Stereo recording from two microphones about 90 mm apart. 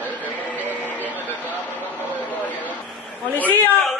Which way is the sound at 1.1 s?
20° right (ahead or behind).